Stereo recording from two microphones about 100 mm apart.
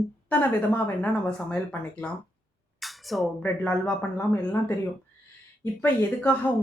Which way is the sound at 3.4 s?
15° left (ahead or behind).